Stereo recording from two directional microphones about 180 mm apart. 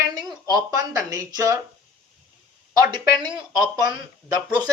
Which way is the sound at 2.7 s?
20° right (ahead or behind).